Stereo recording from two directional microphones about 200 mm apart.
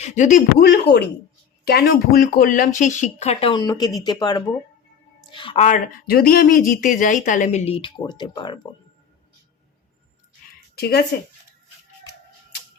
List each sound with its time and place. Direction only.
0.0 s speech: 35° left (ahead or behind)
0.6 s a man's voice: 60° left (ahead or behind); by 8.6 s 20° left (ahead or behind)
10.8 s speech: 50° left (ahead or behind)